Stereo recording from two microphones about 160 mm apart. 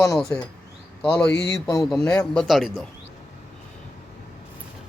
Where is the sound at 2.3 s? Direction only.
5° left (ahead or behind).